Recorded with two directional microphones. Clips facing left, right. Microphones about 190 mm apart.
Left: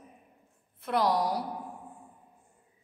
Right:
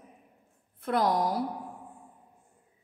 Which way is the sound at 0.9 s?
50° right (ahead or behind).